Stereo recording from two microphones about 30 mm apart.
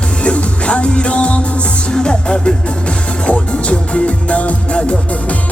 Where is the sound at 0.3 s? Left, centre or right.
Left.